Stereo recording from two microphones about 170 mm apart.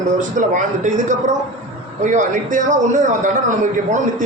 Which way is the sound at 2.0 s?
45° right (ahead or behind).